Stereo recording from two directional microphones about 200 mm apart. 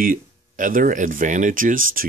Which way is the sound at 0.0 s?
45° right (ahead or behind).